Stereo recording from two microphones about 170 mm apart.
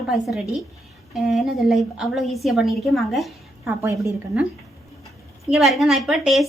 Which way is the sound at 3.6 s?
15° right (ahead or behind).